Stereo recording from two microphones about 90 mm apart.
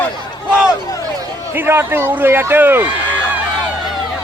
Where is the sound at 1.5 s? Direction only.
25° right (ahead or behind).